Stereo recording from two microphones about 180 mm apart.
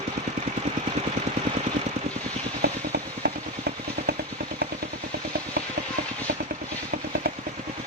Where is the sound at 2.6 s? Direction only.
60° right (ahead or behind).